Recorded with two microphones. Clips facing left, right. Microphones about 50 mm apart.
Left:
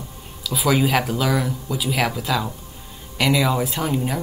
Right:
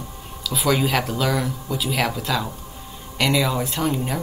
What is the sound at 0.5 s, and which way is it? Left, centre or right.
Speech, centre.